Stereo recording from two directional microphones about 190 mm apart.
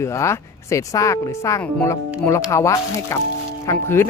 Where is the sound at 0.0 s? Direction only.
15° left (ahead or behind).